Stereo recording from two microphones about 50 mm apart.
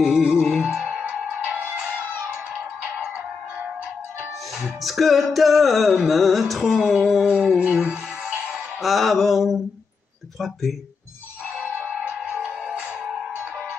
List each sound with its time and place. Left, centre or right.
0.0 s music: centre; by 2.0 s right
4.8 s music: centre
7.2 s music: right
8.8 s music: centre
11.8 s music: right